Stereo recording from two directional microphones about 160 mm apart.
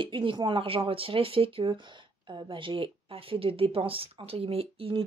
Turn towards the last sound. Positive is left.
turn(degrees=-35)  # may be behind; listen again after turning